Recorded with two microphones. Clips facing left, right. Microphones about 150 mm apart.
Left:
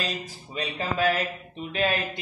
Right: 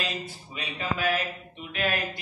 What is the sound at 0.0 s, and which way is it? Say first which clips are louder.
A man's voice: left 1 dB; 35° left (ahead or behind).